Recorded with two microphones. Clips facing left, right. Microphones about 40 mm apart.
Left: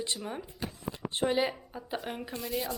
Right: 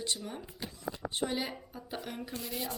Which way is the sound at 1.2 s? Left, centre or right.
Centre.